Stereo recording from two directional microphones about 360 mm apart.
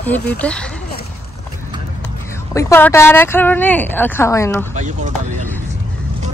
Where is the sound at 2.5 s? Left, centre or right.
Centre.